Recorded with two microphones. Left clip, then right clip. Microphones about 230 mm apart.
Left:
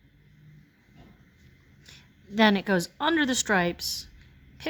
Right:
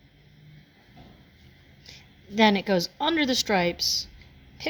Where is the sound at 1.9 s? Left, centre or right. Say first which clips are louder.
Right 2 dB; left.